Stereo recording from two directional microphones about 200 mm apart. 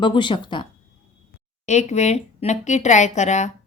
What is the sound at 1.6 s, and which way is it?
Speech, 35° left (ahead or behind).